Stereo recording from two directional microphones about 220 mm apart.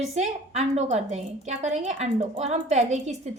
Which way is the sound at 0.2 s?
30° right (ahead or behind).